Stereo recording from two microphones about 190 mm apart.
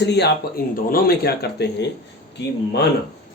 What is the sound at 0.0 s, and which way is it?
Speech, 60° left (ahead or behind).